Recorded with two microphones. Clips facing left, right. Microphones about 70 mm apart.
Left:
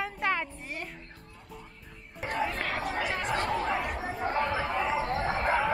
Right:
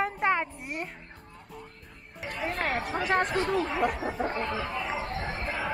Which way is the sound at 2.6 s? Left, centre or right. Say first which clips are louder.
Right 2 dB; right.